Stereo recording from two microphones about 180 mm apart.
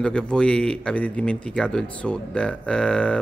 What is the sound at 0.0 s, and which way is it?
Speech, 5° left (ahead or behind).